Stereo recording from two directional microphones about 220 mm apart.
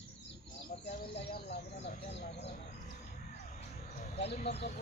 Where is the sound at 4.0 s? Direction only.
35° left (ahead or behind).